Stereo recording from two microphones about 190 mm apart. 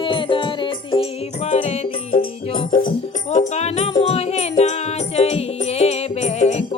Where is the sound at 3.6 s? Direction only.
35° left (ahead or behind).